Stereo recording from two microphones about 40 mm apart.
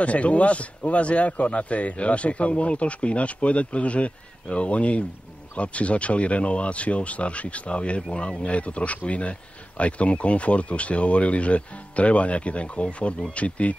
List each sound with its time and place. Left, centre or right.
0.0 s speech: left